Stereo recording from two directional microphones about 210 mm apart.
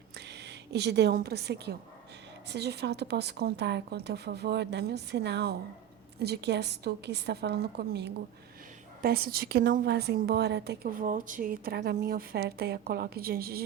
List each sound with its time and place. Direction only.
0.2 s a woman's voice: 50° right (ahead or behind)